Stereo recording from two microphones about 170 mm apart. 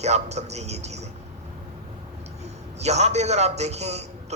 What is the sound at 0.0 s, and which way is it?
Speech, 40° right (ahead or behind).